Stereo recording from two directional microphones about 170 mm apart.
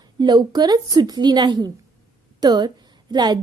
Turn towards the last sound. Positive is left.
turn(degrees=-25)  # may be behind; listen again after turning